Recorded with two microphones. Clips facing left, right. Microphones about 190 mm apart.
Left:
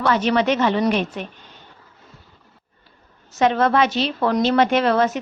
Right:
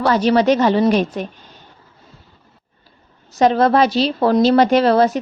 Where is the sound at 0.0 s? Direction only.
35° right (ahead or behind).